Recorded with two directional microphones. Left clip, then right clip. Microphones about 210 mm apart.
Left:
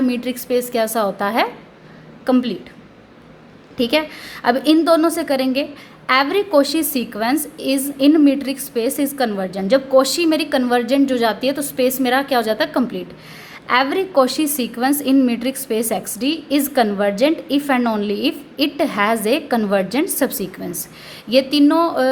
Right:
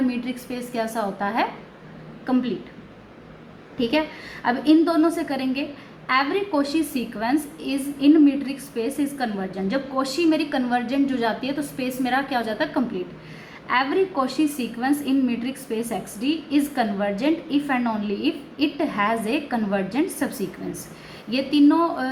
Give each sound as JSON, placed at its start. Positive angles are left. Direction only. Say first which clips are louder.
{"t": 0.1, "sound": "a woman's voice", "louder": "left 10 dB", "side_deg": 50}
{"t": 3.8, "sound": "a woman's voice", "louder": "left 5 dB", "side_deg": 55}